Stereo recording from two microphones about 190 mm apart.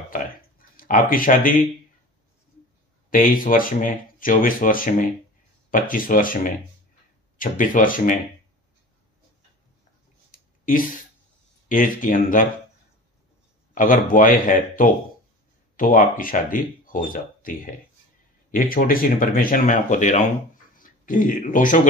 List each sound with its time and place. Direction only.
0.1 s speech: 45° left (ahead or behind)
3.1 s speech: 45° left (ahead or behind)
10.3 s a sound: 45° left (ahead or behind)
11.7 s speech: 45° left (ahead or behind)
13.7 s speech: 45° left (ahead or behind)